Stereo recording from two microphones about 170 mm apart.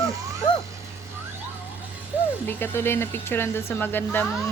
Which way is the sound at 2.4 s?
10° left (ahead or behind).